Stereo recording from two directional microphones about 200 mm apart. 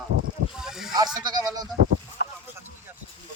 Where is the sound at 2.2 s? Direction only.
55° left (ahead or behind).